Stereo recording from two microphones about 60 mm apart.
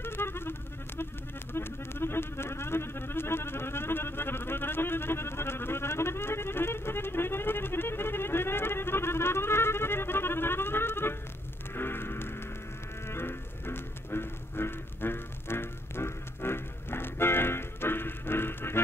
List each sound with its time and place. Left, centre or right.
0.0 s music: left